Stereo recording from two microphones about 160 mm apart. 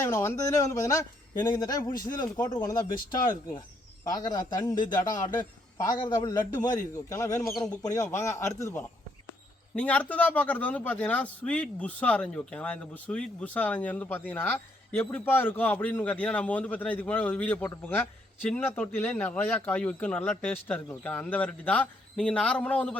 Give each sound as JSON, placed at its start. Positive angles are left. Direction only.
{"t": 0.0, "sound": "a man's voice", "side_deg": 15}